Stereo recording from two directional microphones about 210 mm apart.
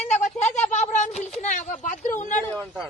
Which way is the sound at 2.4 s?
5° left (ahead or behind).